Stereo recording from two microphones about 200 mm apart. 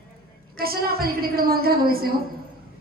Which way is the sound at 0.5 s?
50° right (ahead or behind).